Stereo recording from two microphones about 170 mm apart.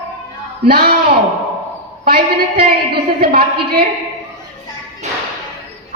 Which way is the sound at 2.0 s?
60° right (ahead or behind).